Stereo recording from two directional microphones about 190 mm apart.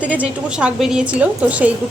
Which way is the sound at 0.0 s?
5° right (ahead or behind).